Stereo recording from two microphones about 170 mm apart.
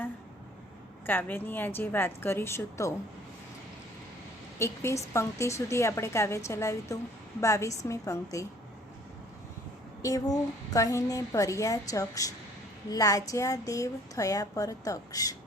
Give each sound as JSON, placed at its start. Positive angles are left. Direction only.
{"t": 1.0, "sound": "a woman's voice", "side_deg": 10}
{"t": 4.5, "sound": "a woman's voice", "side_deg": 15}
{"t": 10.0, "sound": "speech", "side_deg": 20}